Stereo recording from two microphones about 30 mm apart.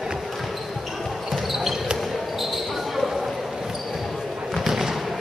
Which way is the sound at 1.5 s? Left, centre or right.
Centre.